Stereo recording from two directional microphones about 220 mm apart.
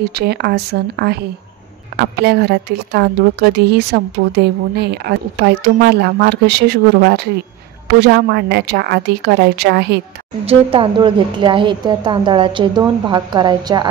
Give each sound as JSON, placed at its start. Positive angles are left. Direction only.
{"t": 0.0, "sound": "a woman's voice", "side_deg": -45}
{"t": 2.2, "sound": "a woman's voice", "side_deg": -50}
{"t": 10.4, "sound": "a woman's voice", "side_deg": -25}